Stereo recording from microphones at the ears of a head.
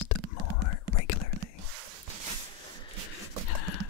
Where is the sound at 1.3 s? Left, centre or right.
Right.